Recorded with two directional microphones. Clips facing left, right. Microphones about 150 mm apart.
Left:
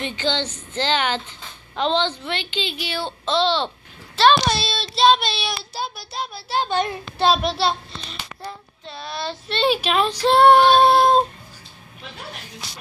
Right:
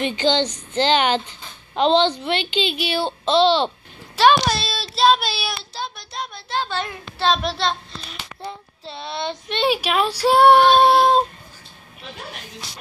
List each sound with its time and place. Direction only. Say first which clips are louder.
0.0 s a child's voice: right 5 dB; 15° right (ahead or behind)
4.5 s child singing: left 1 dB; centre (ahead or behind)
5.6 s speech: left 2 dB; 5° left (ahead or behind)
6.6 s speech: left 8 dB; 20° left (ahead or behind)
7.4 s child singing: left 2 dB; 5° left (ahead or behind)
8.4 s a child's voice: right 2 dB; 25° right (ahead or behind)